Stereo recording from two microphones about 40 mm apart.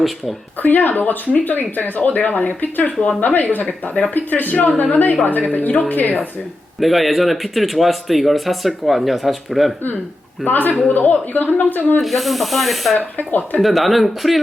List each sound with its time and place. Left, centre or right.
0.6 s speech: left
6.7 s speech: centre
10.4 s speech: left
10.8 s a woman's voice: left
11.0 s speech: left
12.0 s speech: centre
13.0 s speech: left
13.6 s speech: centre